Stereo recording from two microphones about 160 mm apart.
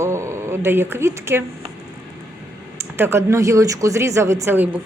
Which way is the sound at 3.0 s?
15° right (ahead or behind).